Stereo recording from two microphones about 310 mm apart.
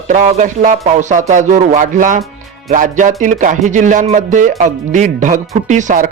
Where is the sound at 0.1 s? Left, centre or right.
Right.